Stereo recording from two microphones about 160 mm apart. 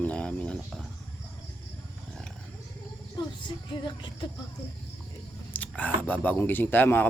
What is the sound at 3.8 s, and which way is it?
Music, 25° left (ahead or behind).